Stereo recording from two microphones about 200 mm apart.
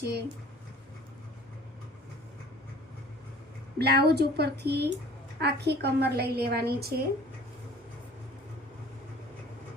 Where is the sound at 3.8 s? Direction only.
55° right (ahead or behind).